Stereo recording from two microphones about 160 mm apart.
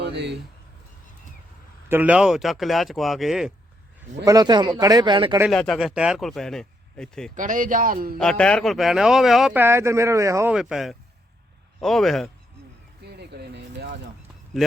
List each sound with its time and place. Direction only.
0.0 s a sound: 90° right
1.9 s speech: 10° right (ahead or behind)
4.3 s speech: 25° right (ahead or behind)
5.5 s speech: centre (ahead or behind)
7.3 s speech: 55° right (ahead or behind)
8.2 s speech: 5° left (ahead or behind)
9.6 s speech: 15° right (ahead or behind)
10.5 s speech: 5° right (ahead or behind)
13.0 s a sound: 90° right